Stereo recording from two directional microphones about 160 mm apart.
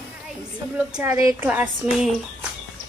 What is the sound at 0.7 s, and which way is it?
Speech, 15° right (ahead or behind).